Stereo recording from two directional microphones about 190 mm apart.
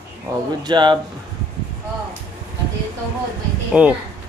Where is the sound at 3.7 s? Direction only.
5° right (ahead or behind).